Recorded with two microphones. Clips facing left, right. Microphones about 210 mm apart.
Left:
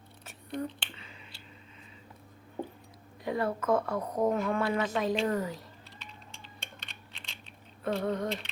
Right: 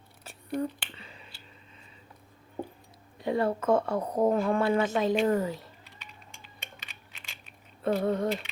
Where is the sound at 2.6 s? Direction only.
5° left (ahead or behind).